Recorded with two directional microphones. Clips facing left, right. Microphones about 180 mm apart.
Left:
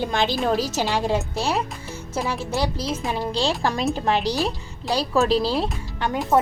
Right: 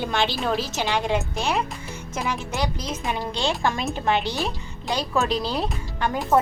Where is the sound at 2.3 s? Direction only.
35° left (ahead or behind).